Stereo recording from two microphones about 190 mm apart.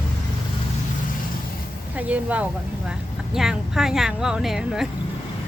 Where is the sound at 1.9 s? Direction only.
10° right (ahead or behind).